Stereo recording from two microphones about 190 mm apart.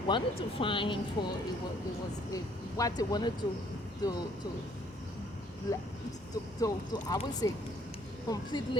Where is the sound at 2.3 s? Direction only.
20° left (ahead or behind).